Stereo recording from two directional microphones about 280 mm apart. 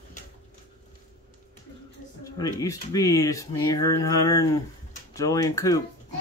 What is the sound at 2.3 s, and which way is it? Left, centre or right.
Speech, centre.